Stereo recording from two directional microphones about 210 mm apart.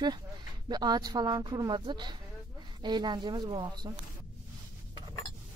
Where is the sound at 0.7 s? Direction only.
20° right (ahead or behind).